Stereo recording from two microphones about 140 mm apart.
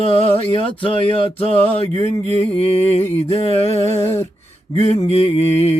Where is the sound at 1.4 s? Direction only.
45° left (ahead or behind).